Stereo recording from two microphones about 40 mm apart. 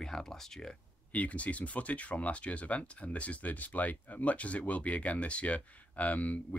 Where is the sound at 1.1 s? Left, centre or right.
Left.